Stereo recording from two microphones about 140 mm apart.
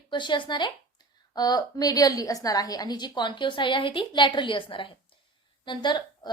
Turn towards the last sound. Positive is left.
turn(degrees=30)  # may be behind; listen again after turning